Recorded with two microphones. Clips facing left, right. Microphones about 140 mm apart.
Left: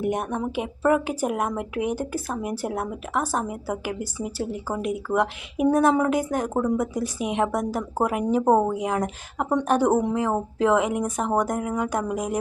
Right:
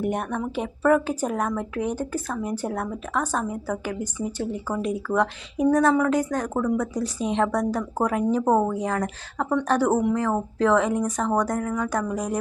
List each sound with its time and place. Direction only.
0.0 s a woman's voice: 10° left (ahead or behind)
8.4 s speech: 25° left (ahead or behind)
8.7 s a woman's voice: 15° left (ahead or behind)